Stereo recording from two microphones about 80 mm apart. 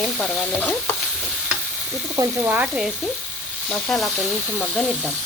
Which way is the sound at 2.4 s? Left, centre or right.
Right.